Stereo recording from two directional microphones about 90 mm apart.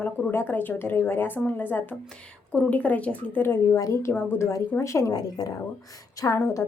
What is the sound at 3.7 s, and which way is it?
A woman's voice, 35° left (ahead or behind).